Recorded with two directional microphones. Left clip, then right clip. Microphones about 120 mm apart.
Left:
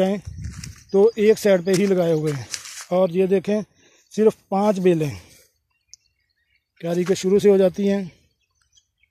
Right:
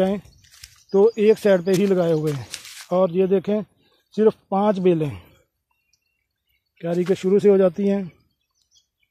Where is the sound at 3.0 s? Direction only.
15° left (ahead or behind).